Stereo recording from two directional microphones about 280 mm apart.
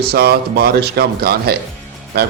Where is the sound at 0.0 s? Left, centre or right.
Right.